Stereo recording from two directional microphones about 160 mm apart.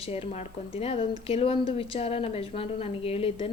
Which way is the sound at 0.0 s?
40° left (ahead or behind).